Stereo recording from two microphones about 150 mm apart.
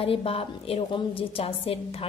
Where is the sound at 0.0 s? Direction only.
40° left (ahead or behind).